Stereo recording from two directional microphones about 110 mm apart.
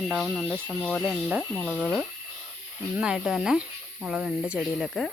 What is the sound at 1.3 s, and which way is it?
Speech, 5° right (ahead or behind).